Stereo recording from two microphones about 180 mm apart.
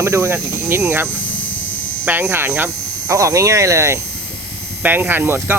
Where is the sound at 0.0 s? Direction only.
15° right (ahead or behind).